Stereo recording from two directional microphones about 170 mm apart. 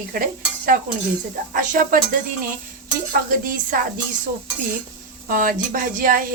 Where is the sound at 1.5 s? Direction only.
55° right (ahead or behind).